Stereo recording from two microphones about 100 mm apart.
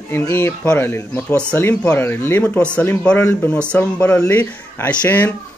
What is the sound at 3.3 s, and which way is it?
Speech, 25° left (ahead or behind).